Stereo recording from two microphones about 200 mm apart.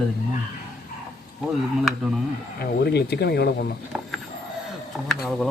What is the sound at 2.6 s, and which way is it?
Speech, 55° left (ahead or behind).